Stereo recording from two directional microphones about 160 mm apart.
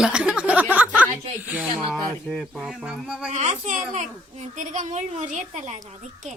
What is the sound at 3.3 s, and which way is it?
A child's voice, 45° right (ahead or behind).